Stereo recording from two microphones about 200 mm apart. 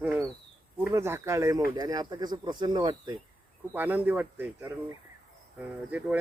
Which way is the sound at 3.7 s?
10° right (ahead or behind).